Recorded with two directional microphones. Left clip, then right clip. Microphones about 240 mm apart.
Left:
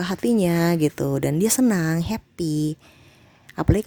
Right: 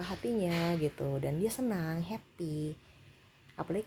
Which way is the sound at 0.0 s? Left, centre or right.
Left.